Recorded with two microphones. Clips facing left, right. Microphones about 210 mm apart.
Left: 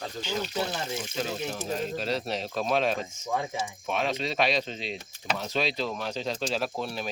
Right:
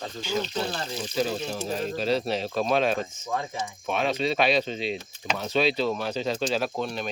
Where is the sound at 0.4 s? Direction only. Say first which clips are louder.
Right 1 dB; 10° left (ahead or behind).